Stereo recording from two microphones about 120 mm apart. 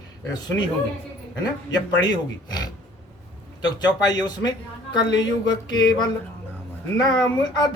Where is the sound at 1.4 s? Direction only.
35° left (ahead or behind).